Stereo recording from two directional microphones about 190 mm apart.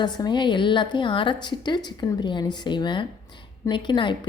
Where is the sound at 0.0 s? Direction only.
25° left (ahead or behind).